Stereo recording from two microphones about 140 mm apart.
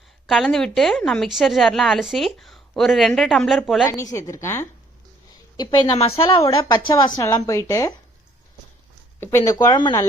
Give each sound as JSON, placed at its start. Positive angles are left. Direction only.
{"t": 0.3, "sound": "a woman's voice", "side_deg": 0}
{"t": 3.8, "sound": "a woman's voice", "side_deg": 20}
{"t": 5.5, "sound": "a woman's voice", "side_deg": 35}
{"t": 6.7, "sound": "a woman's voice", "side_deg": 30}
{"t": 9.2, "sound": "a woman's voice", "side_deg": 20}